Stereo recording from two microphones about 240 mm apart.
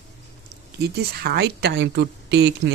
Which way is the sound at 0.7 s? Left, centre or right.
Right.